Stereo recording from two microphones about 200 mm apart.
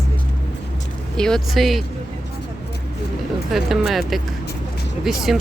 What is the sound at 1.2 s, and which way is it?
Speech, centre (ahead or behind).